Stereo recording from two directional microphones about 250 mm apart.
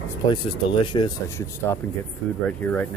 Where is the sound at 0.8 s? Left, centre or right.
Centre.